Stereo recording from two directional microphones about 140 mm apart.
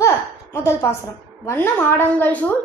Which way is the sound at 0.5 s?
20° left (ahead or behind).